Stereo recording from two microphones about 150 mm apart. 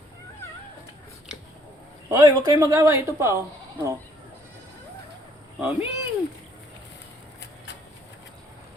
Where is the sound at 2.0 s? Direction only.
25° right (ahead or behind).